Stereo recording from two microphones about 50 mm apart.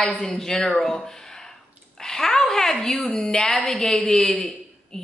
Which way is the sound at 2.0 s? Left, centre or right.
Centre.